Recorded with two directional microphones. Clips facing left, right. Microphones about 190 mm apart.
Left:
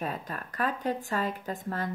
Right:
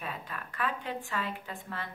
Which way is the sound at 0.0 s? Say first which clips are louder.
Left 5 dB; 40° left (ahead or behind).